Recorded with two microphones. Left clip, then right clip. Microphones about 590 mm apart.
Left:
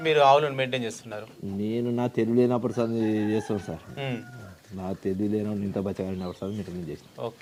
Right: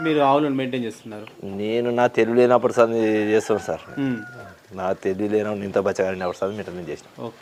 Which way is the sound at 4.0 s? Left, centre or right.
Left.